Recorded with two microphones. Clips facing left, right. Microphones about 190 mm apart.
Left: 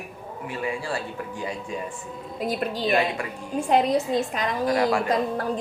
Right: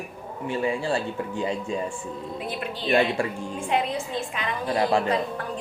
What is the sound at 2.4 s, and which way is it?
A woman's voice, 40° left (ahead or behind).